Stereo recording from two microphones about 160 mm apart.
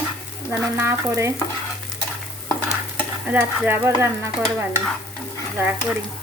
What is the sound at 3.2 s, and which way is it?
Stir, 10° right (ahead or behind).